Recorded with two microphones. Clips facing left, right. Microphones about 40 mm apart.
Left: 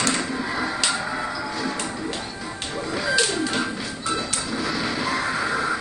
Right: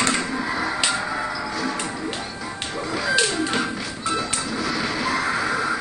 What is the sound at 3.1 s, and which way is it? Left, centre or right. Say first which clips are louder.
Music: right 1 dB; right.